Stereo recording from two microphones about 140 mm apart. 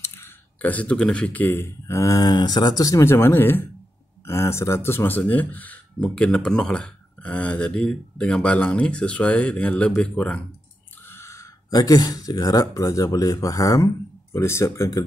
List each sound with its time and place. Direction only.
0.0 s speech: 20° left (ahead or behind)
11.1 s speech: 20° left (ahead or behind)